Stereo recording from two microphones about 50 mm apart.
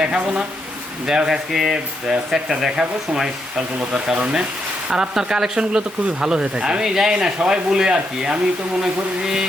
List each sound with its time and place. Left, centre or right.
0.0 s speech: centre
3.8 s speech: right